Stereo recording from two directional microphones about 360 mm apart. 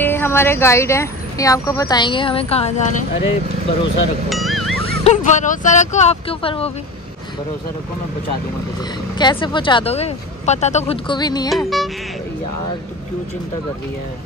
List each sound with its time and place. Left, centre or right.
0.0 s speech: centre
4.3 s music: centre
4.8 s speech: centre
9.2 s speech: centre
11.5 s music: centre